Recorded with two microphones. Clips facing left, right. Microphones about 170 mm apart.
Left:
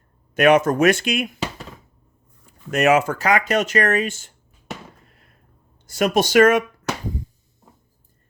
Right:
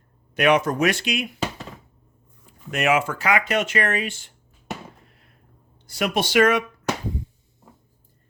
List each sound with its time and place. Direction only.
0.3 s speech: 45° left (ahead or behind)
2.6 s speech: 40° left (ahead or behind)
5.8 s speech: 45° left (ahead or behind)